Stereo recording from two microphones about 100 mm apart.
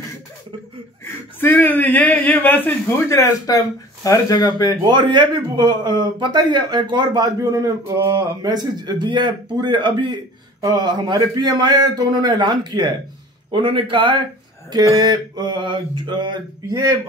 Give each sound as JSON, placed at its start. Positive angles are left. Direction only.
{"t": 1.4, "sound": "speech", "side_deg": 20}
{"t": 4.8, "sound": "speech", "side_deg": -45}
{"t": 13.5, "sound": "a man's voice", "side_deg": -55}
{"t": 15.0, "sound": "speech", "side_deg": -45}
{"t": 16.7, "sound": "a man's voice", "side_deg": -35}